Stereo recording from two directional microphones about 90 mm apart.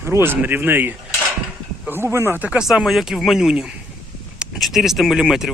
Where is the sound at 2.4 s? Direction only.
10° right (ahead or behind).